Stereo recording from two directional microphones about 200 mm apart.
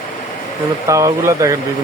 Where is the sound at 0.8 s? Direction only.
15° right (ahead or behind).